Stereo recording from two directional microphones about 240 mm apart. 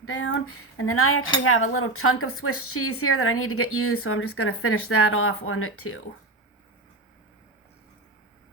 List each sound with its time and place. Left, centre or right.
0.0 s speech: left